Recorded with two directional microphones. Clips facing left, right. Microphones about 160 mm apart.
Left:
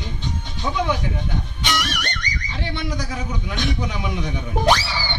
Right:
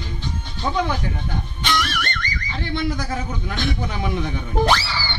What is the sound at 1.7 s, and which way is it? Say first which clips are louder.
Music: right 2 dB; 20° left (ahead or behind).